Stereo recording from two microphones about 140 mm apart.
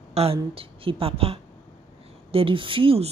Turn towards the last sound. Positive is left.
turn(degrees=-40)  # may be behind; listen again after turning